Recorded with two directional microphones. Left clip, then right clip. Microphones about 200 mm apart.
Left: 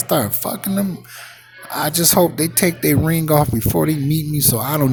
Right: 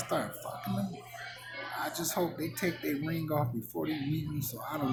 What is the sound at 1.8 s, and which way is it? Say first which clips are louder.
Speech: left 18 dB; 45° left (ahead or behind).